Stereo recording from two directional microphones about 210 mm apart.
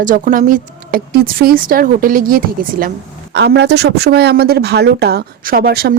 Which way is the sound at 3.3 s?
55° right (ahead or behind).